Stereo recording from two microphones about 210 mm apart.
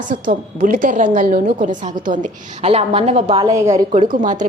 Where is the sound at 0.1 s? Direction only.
40° right (ahead or behind).